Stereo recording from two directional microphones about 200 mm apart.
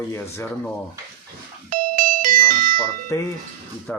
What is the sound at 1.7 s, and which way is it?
Music, 45° right (ahead or behind).